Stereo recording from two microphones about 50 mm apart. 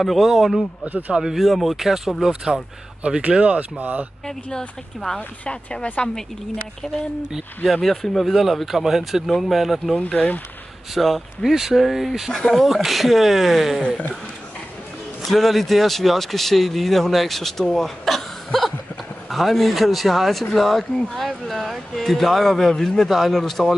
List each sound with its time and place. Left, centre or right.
0.0 s speech: centre
0.8 s speech: right
1.1 s speech: centre
3.2 s speech: right
4.5 s speech: centre
7.7 s speech: centre
9.9 s speech: left
11.0 s speech: centre
12.4 s speech: centre
12.6 s speech: centre
15.2 s speech: centre